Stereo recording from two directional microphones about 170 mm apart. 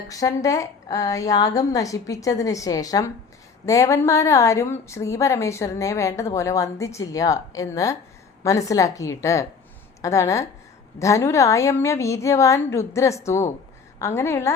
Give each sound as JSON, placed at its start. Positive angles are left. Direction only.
{"t": 0.1, "sound": "a woman's voice", "side_deg": 20}